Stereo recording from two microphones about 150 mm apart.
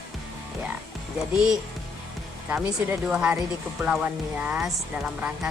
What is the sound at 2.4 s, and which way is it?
Speech, 15° right (ahead or behind).